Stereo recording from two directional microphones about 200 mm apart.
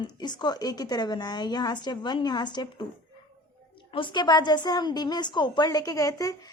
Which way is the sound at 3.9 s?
25° left (ahead or behind).